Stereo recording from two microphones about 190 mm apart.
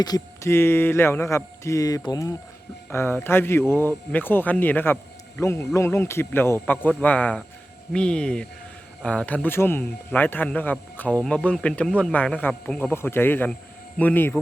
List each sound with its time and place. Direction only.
0.0 s speech: 15° left (ahead or behind)